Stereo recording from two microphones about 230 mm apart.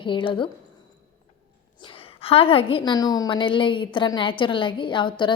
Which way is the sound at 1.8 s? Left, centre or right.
Left.